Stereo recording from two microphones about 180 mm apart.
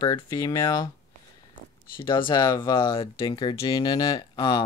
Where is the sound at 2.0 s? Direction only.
30° left (ahead or behind).